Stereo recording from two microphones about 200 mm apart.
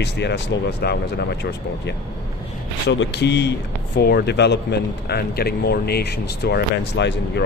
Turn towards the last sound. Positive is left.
turn(degrees=60)  # may be behind; listen again after turning